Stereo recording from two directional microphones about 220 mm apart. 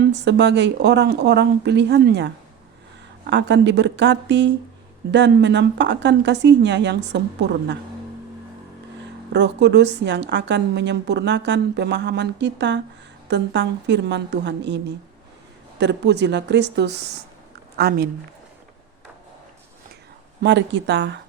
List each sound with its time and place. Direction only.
0.0 s a woman's voice: 50° right (ahead or behind)
9.3 s a woman's voice: 50° right (ahead or behind)
20.4 s a woman's voice: 55° right (ahead or behind)